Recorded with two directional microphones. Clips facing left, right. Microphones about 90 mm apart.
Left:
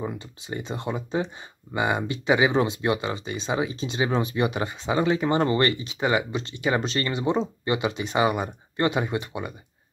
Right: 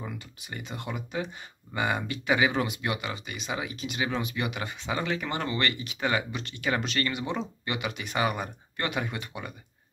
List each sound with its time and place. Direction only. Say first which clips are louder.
0.0 s speech: left 7 dB; 25° left (ahead or behind)